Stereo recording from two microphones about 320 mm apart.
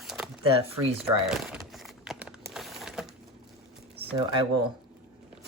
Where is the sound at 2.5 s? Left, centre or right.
Centre.